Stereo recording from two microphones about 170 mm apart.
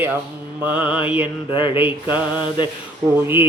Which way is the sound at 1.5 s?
30° left (ahead or behind).